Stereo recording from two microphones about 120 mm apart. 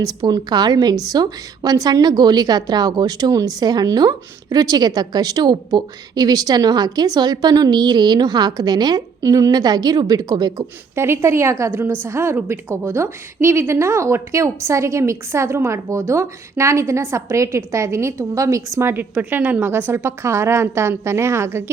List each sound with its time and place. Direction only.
0.0 s a woman's voice: 30° right (ahead or behind)
10.9 s a woman's voice: 20° right (ahead or behind)